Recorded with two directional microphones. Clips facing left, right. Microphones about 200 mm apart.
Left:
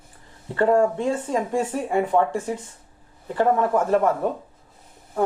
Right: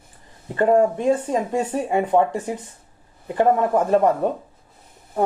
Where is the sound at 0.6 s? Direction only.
20° right (ahead or behind).